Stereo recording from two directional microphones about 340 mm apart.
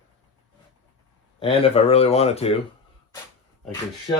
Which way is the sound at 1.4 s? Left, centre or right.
Centre.